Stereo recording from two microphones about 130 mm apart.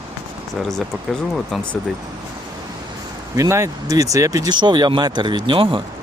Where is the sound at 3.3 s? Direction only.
20° right (ahead or behind); by 5.8 s 40° right (ahead or behind).